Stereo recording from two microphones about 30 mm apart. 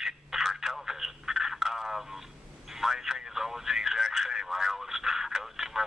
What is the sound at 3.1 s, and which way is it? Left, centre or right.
Radio, centre.